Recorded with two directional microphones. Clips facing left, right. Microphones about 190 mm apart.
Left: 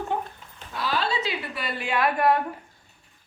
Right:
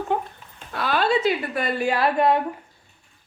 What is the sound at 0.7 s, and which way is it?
A woman's voice, 60° right (ahead or behind).